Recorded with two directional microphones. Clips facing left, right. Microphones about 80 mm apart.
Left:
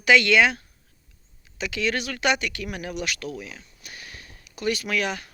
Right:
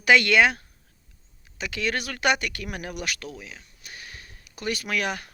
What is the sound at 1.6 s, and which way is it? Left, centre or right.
Speech, right.